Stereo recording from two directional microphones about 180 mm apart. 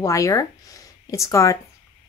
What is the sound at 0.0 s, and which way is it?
Speech, 15° left (ahead or behind).